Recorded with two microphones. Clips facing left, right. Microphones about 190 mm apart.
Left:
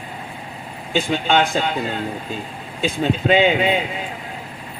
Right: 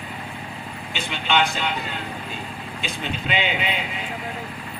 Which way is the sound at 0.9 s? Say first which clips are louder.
Left 6 dB; 40° left (ahead or behind).